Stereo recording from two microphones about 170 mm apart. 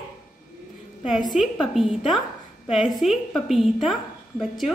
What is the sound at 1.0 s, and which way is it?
A woman's voice, centre (ahead or behind).